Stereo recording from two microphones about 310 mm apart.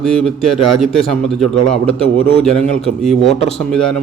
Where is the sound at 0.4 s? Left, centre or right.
Centre.